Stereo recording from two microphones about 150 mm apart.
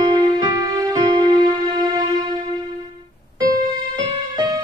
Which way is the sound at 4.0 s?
25° right (ahead or behind).